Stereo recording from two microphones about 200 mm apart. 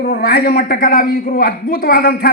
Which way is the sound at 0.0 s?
55° left (ahead or behind).